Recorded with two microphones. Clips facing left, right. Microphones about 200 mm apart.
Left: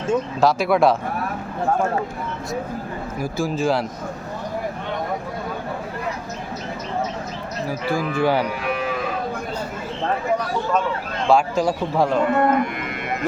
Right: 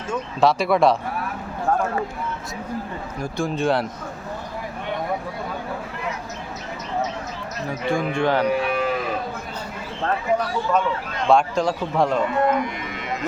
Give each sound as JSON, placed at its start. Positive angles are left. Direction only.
{"t": 0.1, "sound": "a man's voice", "side_deg": 0}
{"t": 3.2, "sound": "a man's voice", "side_deg": 0}
{"t": 7.9, "sound": "a man's voice", "side_deg": 5}
{"t": 11.3, "sound": "a man's voice", "side_deg": 0}
{"t": 12.4, "sound": "speech", "side_deg": 55}